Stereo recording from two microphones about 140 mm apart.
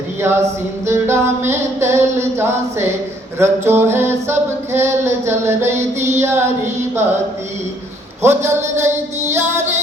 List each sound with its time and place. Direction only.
0.2 s a sound: 20° right (ahead or behind)
0.9 s singing: 20° right (ahead or behind)
8.2 s singing: 20° right (ahead or behind)